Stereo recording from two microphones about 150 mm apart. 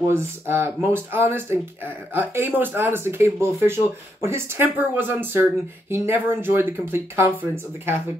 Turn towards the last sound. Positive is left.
turn(degrees=-15)  # may be behind; listen again after turning